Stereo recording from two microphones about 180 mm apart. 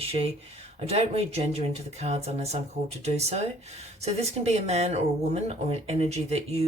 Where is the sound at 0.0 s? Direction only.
30° right (ahead or behind).